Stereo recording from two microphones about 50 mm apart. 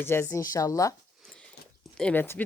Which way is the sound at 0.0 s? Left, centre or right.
Left.